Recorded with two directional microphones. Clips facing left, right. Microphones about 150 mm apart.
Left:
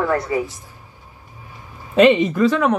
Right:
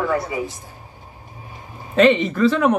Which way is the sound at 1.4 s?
20° right (ahead or behind).